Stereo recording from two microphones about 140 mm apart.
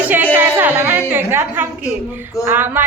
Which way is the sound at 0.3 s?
15° right (ahead or behind).